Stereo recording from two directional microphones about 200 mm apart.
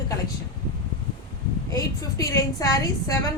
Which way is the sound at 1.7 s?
15° left (ahead or behind).